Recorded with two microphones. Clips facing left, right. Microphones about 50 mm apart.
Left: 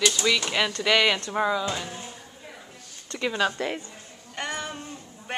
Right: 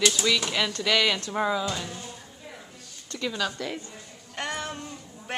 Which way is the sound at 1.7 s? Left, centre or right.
Left.